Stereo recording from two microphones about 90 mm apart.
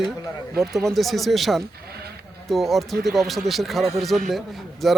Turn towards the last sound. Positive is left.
turn(degrees=0)  # may be behind; listen again after turning